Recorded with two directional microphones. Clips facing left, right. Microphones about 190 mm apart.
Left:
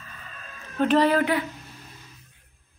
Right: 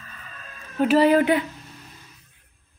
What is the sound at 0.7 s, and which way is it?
Speech, 10° right (ahead or behind).